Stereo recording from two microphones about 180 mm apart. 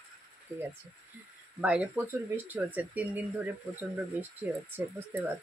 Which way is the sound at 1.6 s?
5° right (ahead or behind).